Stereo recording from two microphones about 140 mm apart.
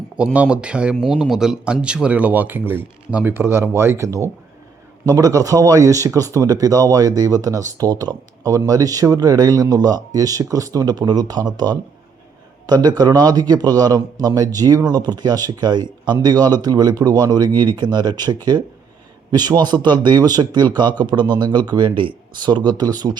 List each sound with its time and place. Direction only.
0.3 s speech: 10° right (ahead or behind); by 23.1 s 30° right (ahead or behind)